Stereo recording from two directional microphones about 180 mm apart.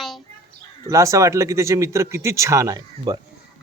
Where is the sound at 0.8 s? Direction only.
15° right (ahead or behind).